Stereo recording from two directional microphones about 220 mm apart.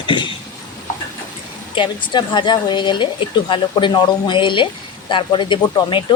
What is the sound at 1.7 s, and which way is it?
A woman's voice, 20° left (ahead or behind).